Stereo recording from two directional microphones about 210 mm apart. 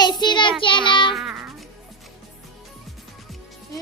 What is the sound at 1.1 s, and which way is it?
Music, centre (ahead or behind).